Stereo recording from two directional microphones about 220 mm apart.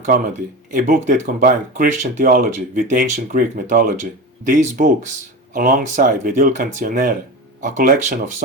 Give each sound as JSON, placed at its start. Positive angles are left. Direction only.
{"t": 0.7, "sound": "speech", "side_deg": -35}